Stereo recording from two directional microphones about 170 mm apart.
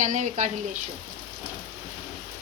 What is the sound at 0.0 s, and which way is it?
Speech, 45° right (ahead or behind).